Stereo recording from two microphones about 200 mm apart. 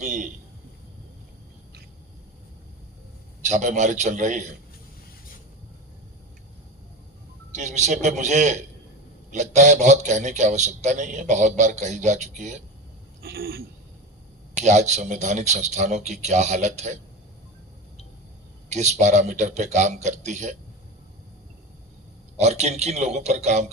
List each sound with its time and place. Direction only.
0.0 s a sound: 35° right (ahead or behind)
3.4 s a man's voice: 35° right (ahead or behind)
7.5 s a man's voice: 35° right (ahead or behind)
13.2 s speech: 50° right (ahead or behind)
14.5 s a man's voice: 35° right (ahead or behind)
18.7 s a man's voice: 35° right (ahead or behind)
22.4 s a man's voice: 35° right (ahead or behind)